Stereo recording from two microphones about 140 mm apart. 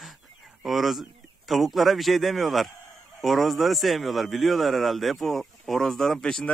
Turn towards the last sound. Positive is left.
turn(degrees=5)  # may be behind; listen again after turning